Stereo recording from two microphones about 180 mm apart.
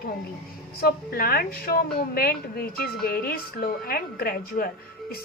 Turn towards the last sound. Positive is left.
turn(degrees=55)  # may be behind; listen again after turning